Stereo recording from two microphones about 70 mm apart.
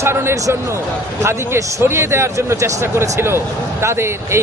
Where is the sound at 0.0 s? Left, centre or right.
Right.